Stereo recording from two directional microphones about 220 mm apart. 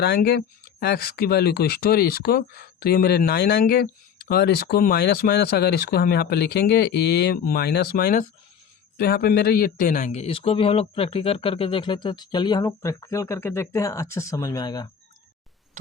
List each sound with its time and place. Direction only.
0.0 s a man's voice: 45° left (ahead or behind); by 14.8 s 15° left (ahead or behind)